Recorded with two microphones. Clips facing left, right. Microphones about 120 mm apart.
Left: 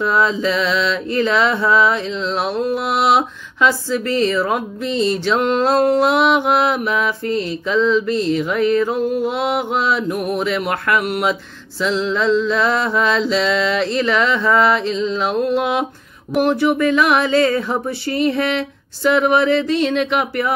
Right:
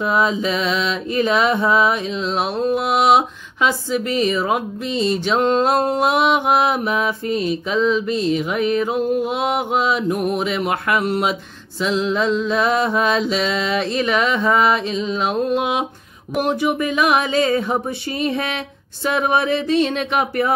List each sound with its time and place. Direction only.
0.0 s mantra: 20° right (ahead or behind)